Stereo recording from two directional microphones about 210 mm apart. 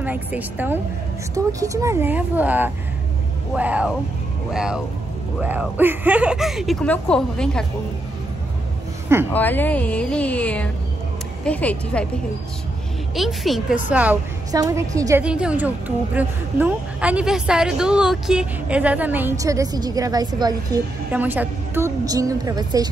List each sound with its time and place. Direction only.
0.0 s a woman's voice: 5° right (ahead or behind)
9.3 s speech: 10° left (ahead or behind)
13.1 s a woman's voice: centre (ahead or behind); by 20.8 s 20° right (ahead or behind)
21.1 s a woman's voice: 10° right (ahead or behind)